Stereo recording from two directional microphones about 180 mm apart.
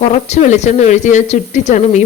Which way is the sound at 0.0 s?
40° left (ahead or behind).